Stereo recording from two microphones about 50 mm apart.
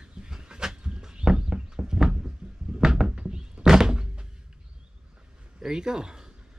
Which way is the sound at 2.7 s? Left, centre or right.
Centre.